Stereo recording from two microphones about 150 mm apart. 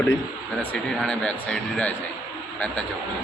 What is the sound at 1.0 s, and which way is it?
Speech, 5° left (ahead or behind).